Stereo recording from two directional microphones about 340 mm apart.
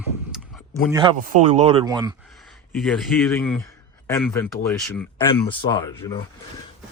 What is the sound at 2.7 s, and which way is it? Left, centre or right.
Speech, centre.